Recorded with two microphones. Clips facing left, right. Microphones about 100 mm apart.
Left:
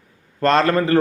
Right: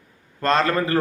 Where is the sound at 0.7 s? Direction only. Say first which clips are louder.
Left 4 dB; 30° left (ahead or behind).